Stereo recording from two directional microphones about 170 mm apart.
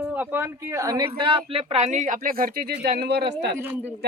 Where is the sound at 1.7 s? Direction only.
45° right (ahead or behind).